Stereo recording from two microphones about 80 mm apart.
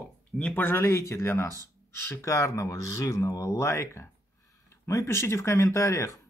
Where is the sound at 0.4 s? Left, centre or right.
Centre.